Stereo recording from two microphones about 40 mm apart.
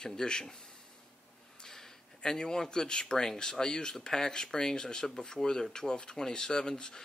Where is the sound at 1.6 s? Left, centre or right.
Centre.